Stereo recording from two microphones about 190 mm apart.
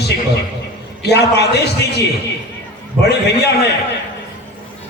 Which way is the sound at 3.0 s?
60° left (ahead or behind).